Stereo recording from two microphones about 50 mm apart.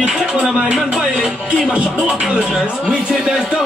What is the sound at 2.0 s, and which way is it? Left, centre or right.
Speech, centre.